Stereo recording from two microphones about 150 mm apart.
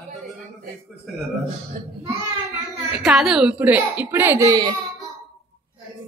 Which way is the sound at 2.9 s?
5° right (ahead or behind).